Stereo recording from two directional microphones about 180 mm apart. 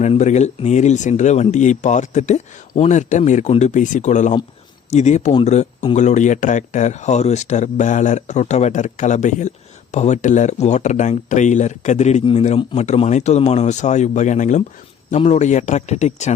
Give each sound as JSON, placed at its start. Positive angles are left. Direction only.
{"t": 0.0, "sound": "speech", "side_deg": 40}